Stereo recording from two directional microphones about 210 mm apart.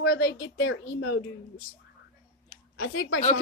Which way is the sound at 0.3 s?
50° left (ahead or behind).